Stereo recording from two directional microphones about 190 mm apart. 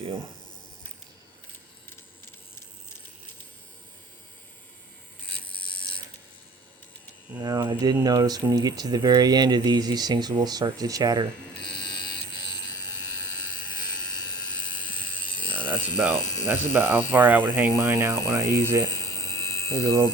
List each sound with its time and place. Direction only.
7.3 s speech: 20° right (ahead or behind)
11.8 s fire alarm: 25° left (ahead or behind)
13.7 s helicopter: 20° left (ahead or behind)
15.6 s mechanisms: 10° right (ahead or behind)
16.5 s speech: 10° right (ahead or behind)
18.9 s a sound: 20° left (ahead or behind)
19.8 s speech: 20° right (ahead or behind)